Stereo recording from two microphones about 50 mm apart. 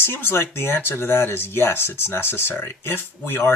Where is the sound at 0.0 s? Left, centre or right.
Left.